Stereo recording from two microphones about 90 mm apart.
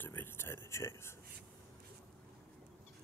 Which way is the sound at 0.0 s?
25° left (ahead or behind).